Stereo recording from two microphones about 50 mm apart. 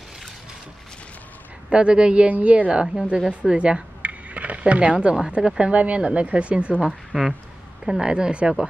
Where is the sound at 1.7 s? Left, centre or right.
Right.